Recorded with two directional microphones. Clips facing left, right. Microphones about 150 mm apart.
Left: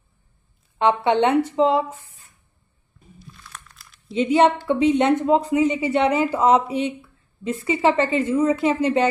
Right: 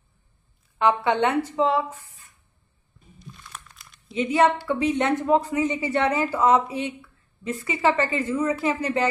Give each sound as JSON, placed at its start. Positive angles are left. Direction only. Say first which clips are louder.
{"t": 0.7, "sound": "speech", "louder": "left 3 dB", "side_deg": 25}
{"t": 3.2, "sound": "crumpling", "louder": "right 1 dB", "side_deg": 0}
{"t": 4.1, "sound": "speech", "louder": "left 3 dB", "side_deg": 25}